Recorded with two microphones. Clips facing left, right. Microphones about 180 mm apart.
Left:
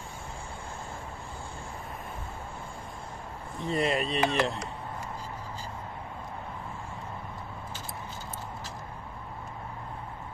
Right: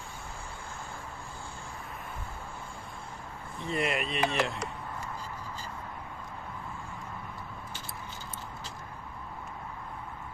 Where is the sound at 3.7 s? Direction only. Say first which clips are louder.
Left 3 dB; 30° left (ahead or behind).